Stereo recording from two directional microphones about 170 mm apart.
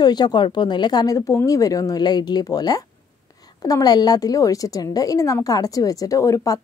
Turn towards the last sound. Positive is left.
turn(degrees=20)  # may be behind; listen again after turning